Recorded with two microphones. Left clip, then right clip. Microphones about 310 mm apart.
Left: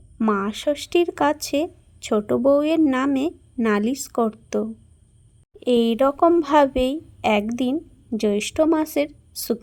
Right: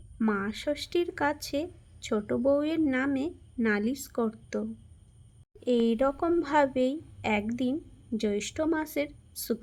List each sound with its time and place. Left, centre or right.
0.2 s a woman's voice: left
5.5 s a woman's voice: left